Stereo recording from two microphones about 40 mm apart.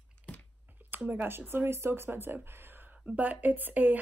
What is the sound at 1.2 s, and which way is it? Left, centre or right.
Speech, right.